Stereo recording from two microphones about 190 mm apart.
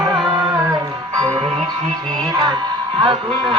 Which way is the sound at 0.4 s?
20° right (ahead or behind).